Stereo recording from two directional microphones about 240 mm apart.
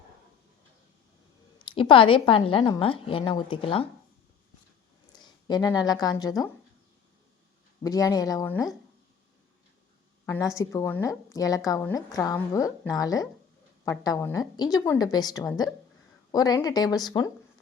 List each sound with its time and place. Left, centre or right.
1.5 s a woman's voice: left
5.1 s speech: centre
7.9 s a woman's voice: centre
10.2 s a woman's voice: centre